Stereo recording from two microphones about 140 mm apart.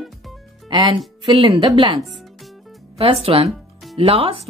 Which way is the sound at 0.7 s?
35° right (ahead or behind).